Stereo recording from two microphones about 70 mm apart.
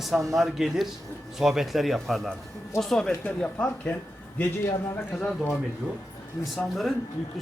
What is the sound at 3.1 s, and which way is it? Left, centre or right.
Speech, left.